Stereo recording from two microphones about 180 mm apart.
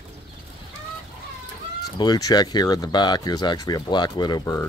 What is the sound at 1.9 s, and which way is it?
Speech, 20° left (ahead or behind).